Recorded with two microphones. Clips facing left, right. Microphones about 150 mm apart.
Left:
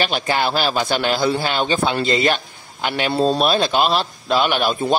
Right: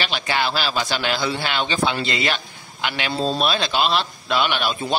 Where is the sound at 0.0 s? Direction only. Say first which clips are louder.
Left 4 dB; 45° left (ahead or behind).